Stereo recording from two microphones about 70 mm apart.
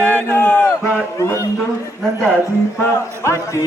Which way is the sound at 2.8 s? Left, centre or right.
Left.